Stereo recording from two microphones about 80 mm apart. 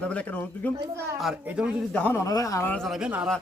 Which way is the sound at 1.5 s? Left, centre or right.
Centre.